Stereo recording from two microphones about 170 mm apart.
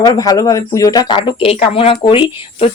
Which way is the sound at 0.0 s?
20° left (ahead or behind).